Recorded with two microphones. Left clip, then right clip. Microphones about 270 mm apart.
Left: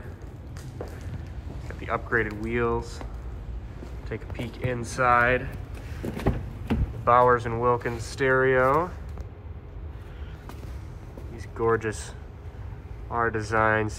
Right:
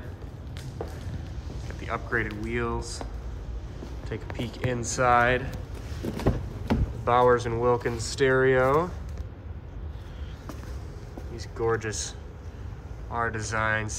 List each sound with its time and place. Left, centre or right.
1.7 s speech: centre
4.1 s speech: centre
7.1 s speech: centre
11.3 s speech: centre
13.1 s speech: centre